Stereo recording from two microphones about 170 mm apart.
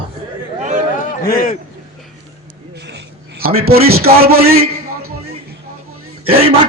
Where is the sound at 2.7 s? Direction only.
90° right.